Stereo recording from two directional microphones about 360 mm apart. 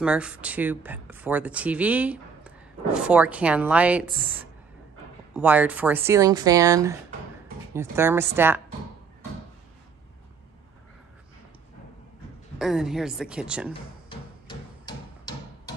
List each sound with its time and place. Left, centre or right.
0.0 s speech: centre
12.5 s speech: centre
14.0 s a sound: centre